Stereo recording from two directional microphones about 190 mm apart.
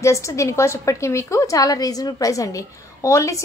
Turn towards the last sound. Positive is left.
turn(degrees=15)  # may be behind; listen again after turning